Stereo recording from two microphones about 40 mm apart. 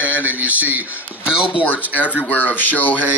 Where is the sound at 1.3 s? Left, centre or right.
Right.